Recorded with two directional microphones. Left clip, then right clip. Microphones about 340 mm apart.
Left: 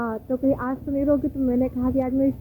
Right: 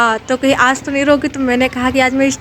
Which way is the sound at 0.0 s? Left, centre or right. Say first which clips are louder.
Right 12 dB; centre.